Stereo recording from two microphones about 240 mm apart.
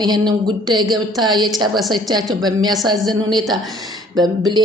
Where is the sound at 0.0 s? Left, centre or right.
Centre.